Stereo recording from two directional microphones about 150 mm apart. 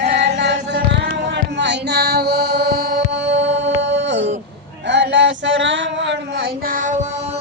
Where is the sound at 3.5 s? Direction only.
50° right (ahead or behind).